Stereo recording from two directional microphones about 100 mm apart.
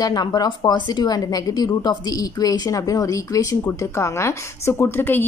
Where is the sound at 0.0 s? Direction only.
40° left (ahead or behind).